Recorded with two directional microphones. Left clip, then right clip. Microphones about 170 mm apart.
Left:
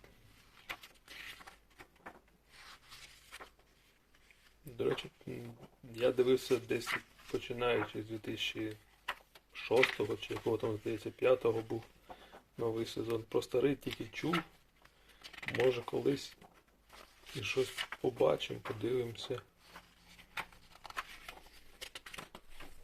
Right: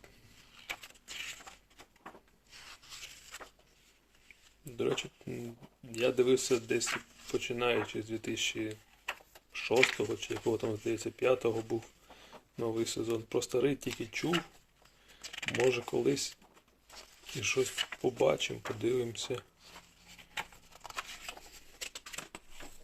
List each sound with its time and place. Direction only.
4.8 s speech: 30° right (ahead or behind)
17.4 s speech: 30° right (ahead or behind)
21.8 s patter: 30° right (ahead or behind)